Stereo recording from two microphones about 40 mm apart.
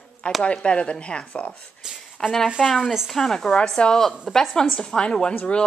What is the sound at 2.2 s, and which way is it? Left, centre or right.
Speech, centre.